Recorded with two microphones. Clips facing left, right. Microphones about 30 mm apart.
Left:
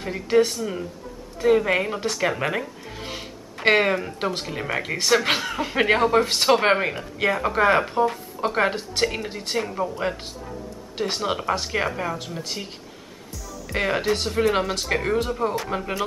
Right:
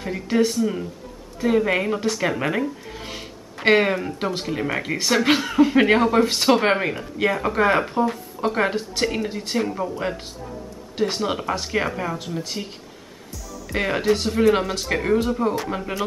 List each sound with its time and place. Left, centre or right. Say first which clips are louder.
0.0 s speech: left 1 dB; centre